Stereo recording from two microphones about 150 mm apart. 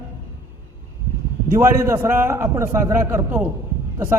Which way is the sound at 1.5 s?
20° right (ahead or behind).